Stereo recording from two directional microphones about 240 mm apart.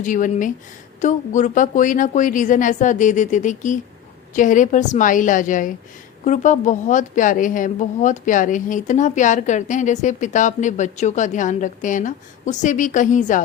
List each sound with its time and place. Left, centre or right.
0.0 s a woman's voice: left